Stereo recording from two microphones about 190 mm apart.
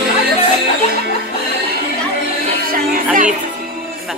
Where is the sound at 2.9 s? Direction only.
45° right (ahead or behind).